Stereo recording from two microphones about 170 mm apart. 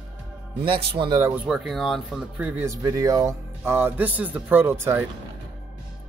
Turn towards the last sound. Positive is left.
turn(degrees=-15)  # may be behind; listen again after turning